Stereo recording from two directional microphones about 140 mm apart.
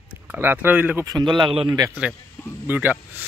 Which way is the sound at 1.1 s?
30° right (ahead or behind).